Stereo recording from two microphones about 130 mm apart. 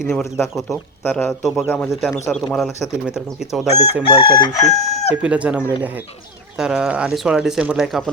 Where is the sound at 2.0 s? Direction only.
Centre (ahead or behind).